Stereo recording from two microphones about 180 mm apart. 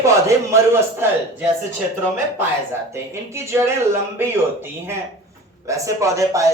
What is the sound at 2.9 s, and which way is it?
A man's voice, 15° right (ahead or behind).